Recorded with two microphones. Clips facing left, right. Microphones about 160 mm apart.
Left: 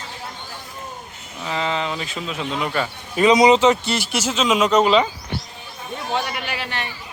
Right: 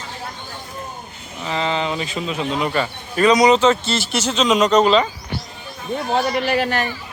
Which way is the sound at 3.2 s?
25° left (ahead or behind).